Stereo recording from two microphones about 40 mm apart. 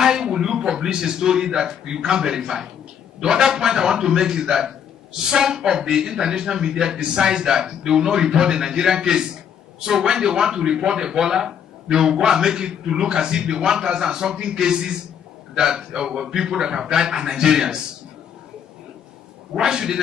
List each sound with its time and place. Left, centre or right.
0.0 s a man's voice: centre
19.5 s a man's voice: centre